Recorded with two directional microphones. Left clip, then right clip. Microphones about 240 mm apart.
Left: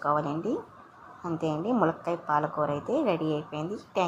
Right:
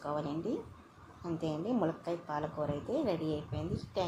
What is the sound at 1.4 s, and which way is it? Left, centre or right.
A woman's voice, centre.